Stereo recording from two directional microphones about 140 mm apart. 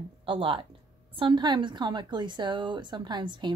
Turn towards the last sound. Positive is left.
turn(degrees=-35)  # may be behind; listen again after turning